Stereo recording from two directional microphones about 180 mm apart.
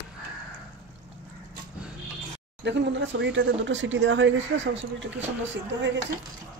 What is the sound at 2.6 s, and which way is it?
Speech, 75° right (ahead or behind).